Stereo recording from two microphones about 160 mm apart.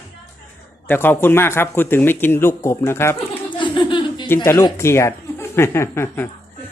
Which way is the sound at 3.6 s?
30° left (ahead or behind).